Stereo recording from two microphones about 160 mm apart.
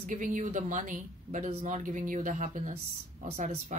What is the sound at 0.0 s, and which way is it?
Speech, 55° right (ahead or behind).